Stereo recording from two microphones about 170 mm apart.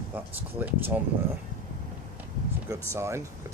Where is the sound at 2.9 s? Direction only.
15° right (ahead or behind).